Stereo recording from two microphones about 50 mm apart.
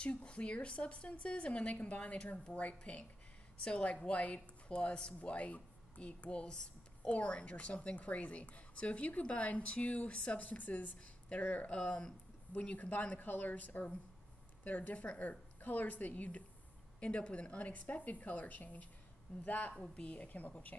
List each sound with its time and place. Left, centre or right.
0.0 s a woman's voice: left